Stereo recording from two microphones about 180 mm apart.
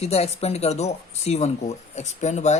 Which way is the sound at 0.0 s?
35° left (ahead or behind).